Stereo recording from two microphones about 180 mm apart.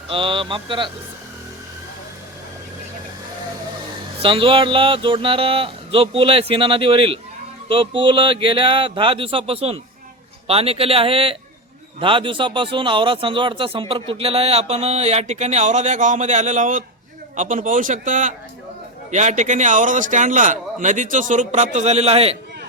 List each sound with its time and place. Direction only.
0.1 s speech: 30° right (ahead or behind)
4.2 s a man's voice: 30° right (ahead or behind)